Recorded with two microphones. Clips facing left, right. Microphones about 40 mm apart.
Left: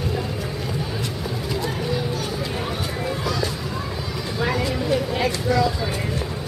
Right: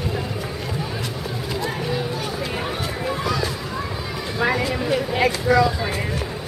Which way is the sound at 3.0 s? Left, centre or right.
Centre.